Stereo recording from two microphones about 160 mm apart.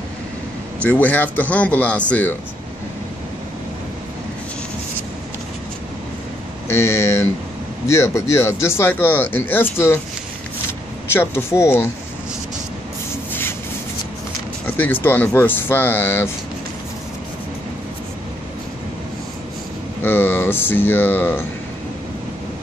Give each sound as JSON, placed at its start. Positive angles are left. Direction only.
{"t": 0.8, "sound": "speech", "side_deg": 10}
{"t": 6.7, "sound": "speech", "side_deg": 15}
{"t": 11.1, "sound": "speech", "side_deg": 15}
{"t": 13.3, "sound": "a sound", "side_deg": 15}
{"t": 14.8, "sound": "speech", "side_deg": 10}
{"t": 20.0, "sound": "speech", "side_deg": 15}